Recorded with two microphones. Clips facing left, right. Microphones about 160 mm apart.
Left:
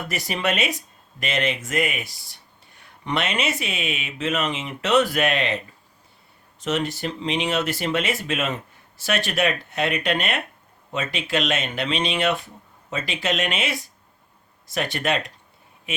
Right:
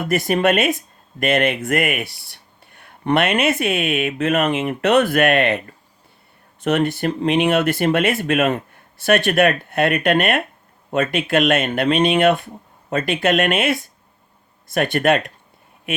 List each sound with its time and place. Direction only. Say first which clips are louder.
0.0 s speech: right 9 dB; 55° right (ahead or behind)